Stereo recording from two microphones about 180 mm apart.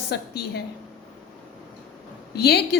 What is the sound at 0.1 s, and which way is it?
Speech, 65° left (ahead or behind).